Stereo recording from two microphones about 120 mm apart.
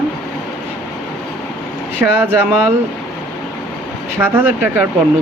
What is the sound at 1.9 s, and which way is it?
Speech, 15° right (ahead or behind).